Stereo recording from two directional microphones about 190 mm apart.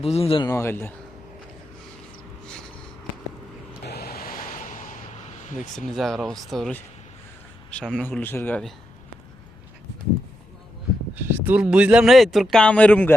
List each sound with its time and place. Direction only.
0.0 s speech: 30° left (ahead or behind)
0.5 s speech: 10° left (ahead or behind)
3.8 s a sound: 55° left (ahead or behind)
5.9 s speech: centre (ahead or behind)
11.1 s speech: 10° right (ahead or behind); by 13.1 s 10° left (ahead or behind)